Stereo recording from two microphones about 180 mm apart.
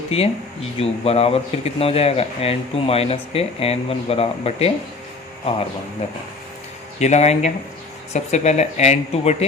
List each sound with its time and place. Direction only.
0.1 s speech: 35° left (ahead or behind)
7.0 s speech: 40° left (ahead or behind)